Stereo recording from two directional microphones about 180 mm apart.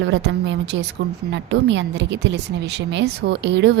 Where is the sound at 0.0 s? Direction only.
90° right.